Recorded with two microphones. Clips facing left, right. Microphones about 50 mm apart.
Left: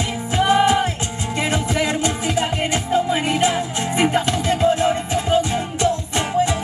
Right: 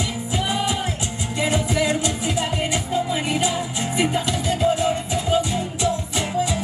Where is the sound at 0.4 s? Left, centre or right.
Left.